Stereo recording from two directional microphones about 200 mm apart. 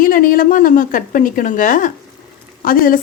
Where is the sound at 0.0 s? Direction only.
45° left (ahead or behind).